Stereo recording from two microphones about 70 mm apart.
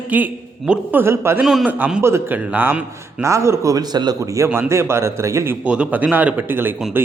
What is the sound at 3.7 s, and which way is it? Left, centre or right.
Speech, right.